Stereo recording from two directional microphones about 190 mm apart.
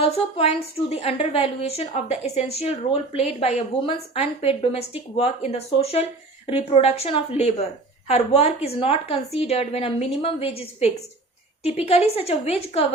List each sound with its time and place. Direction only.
0.0 s a woman's voice: 35° left (ahead or behind)